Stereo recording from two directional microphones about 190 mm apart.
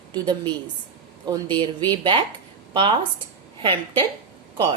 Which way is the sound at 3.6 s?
30° right (ahead or behind).